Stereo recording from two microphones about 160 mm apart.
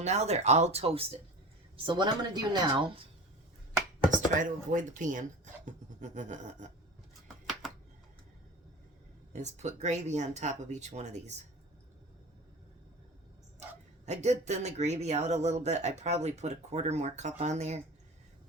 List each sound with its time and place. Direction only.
0.0 s a woman's voice: 45° right (ahead or behind)
4.4 s speech: 55° right (ahead or behind)
9.3 s speech: 45° right (ahead or behind)
14.0 s speech: 45° right (ahead or behind)